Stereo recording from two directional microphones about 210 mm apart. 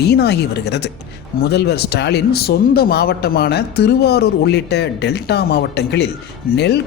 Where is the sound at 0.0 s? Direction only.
50° left (ahead or behind).